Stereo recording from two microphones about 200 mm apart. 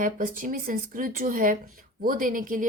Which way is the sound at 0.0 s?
40° right (ahead or behind).